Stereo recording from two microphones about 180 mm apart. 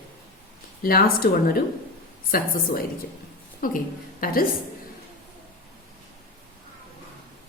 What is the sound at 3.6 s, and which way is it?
Speech, 50° left (ahead or behind).